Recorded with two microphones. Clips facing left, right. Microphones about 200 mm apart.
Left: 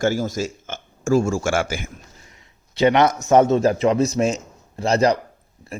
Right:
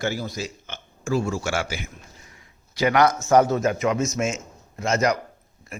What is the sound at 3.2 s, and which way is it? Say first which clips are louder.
A man's voice: left 3 dB; 25° left (ahead or behind).